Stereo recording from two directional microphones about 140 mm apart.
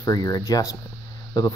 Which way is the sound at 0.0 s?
25° left (ahead or behind).